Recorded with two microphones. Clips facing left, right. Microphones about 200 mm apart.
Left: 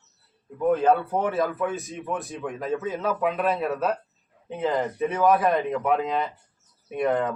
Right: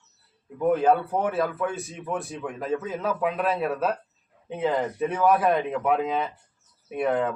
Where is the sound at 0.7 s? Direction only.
5° right (ahead or behind).